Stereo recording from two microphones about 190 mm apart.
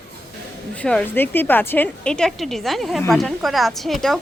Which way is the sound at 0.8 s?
5° left (ahead or behind).